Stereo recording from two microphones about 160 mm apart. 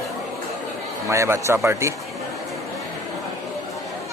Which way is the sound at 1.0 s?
20° right (ahead or behind).